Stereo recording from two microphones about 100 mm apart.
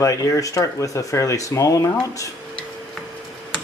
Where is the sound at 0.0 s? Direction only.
30° left (ahead or behind).